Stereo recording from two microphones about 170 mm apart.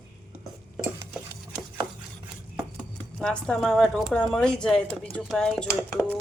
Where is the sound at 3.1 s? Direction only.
5° left (ahead or behind).